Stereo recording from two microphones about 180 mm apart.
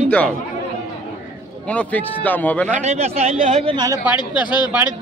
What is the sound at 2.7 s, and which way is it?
A man's voice, 40° right (ahead or behind).